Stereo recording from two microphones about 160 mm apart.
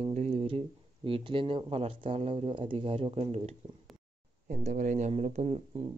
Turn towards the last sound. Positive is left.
turn(degrees=-40)  # may be behind; listen again after turning